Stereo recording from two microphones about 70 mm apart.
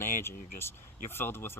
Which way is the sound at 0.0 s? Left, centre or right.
Left.